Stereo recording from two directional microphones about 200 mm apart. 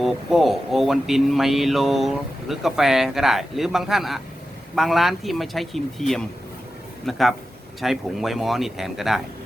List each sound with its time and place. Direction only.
0.0 s speech: centre (ahead or behind)